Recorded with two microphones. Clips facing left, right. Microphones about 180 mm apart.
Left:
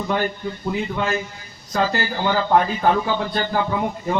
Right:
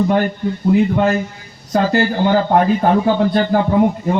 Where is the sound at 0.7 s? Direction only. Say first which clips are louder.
Right 10 dB; 50° right (ahead or behind).